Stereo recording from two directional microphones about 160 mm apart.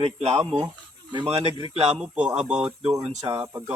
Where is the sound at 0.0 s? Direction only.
40° right (ahead or behind).